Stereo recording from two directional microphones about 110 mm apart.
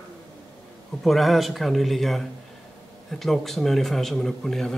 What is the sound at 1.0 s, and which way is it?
A man's voice, centre (ahead or behind).